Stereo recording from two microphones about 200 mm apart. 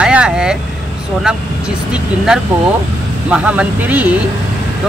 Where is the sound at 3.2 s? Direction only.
5° right (ahead or behind).